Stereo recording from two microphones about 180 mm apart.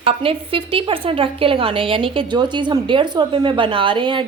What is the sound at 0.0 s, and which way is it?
A woman's voice, 30° right (ahead or behind).